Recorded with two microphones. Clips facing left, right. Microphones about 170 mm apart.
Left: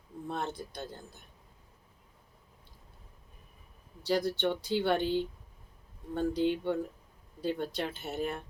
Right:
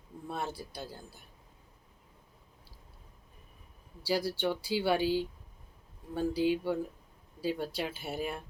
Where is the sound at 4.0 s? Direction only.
10° right (ahead or behind).